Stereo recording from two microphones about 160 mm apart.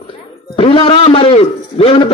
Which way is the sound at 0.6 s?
35° left (ahead or behind).